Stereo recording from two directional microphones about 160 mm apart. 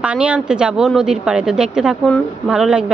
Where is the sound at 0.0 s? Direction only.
5° right (ahead or behind).